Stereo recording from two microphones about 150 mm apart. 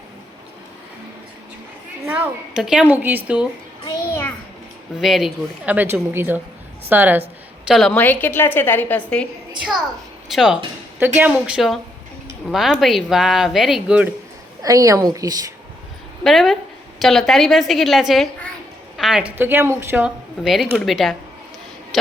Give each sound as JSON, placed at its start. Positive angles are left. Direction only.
{"t": 2.0, "sound": "a woman's voice", "side_deg": -10}
{"t": 3.8, "sound": "a sound", "side_deg": 20}
{"t": 4.9, "sound": "a woman's voice", "side_deg": 0}
{"t": 7.7, "sound": "speech", "side_deg": 0}
{"t": 7.9, "sound": "a woman's voice", "side_deg": 10}
{"t": 10.2, "sound": "a woman's voice", "side_deg": -5}
{"t": 14.6, "sound": "a woman's voice", "side_deg": -20}
{"t": 16.2, "sound": "speech", "side_deg": 0}